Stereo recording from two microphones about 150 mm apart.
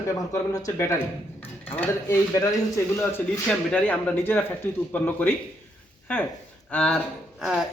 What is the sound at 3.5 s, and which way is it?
Speech, 10° left (ahead or behind).